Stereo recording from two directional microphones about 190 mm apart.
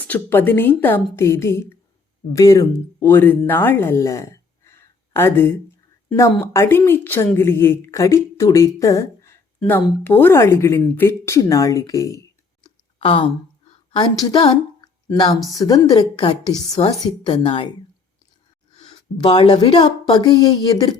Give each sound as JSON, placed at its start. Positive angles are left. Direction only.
{"t": 0.1, "sound": "speech", "side_deg": 10}
{"t": 12.6, "sound": "clicking", "side_deg": 25}
{"t": 13.9, "sound": "a woman's voice", "side_deg": 20}
{"t": 18.8, "sound": "a woman's voice", "side_deg": 25}